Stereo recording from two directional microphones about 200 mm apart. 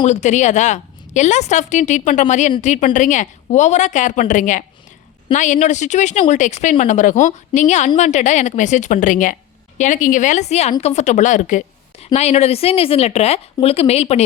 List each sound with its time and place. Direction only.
0.0 s speech: 35° left (ahead or behind)